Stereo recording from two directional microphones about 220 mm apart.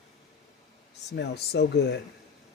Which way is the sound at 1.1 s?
50° left (ahead or behind).